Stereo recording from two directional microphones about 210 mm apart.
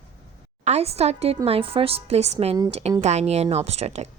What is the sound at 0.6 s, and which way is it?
A woman's voice, 30° right (ahead or behind).